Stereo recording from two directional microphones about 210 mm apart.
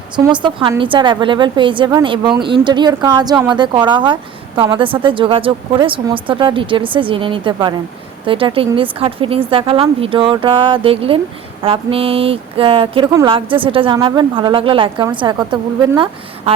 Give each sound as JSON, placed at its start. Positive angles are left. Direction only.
{"t": 0.3, "sound": "a woman's voice", "side_deg": -20}